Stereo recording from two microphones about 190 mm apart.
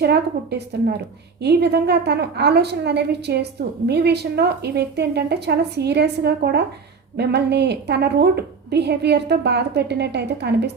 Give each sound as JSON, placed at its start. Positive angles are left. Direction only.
{"t": 0.0, "sound": "a woman's voice", "side_deg": -60}